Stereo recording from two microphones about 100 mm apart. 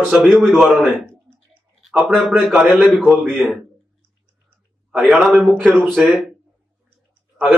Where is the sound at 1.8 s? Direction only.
Centre (ahead or behind).